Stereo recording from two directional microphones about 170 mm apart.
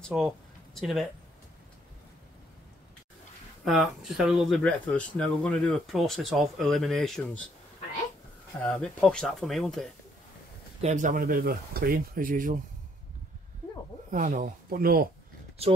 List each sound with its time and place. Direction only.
0.0 s speech: centre (ahead or behind)
3.6 s speech: centre (ahead or behind)
8.8 s speech: 5° left (ahead or behind)
10.8 s speech: 45° right (ahead or behind)
14.1 s speech: 50° right (ahead or behind)
15.6 s speech: 35° right (ahead or behind)